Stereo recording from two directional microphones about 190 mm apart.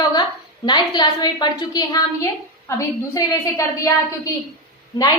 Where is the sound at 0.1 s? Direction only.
20° left (ahead or behind).